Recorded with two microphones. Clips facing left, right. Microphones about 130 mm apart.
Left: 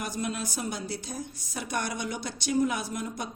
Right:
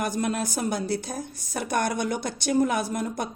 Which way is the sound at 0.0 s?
55° right (ahead or behind).